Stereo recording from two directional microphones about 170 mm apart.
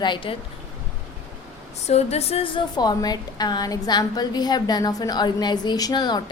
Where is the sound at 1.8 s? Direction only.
40° left (ahead or behind).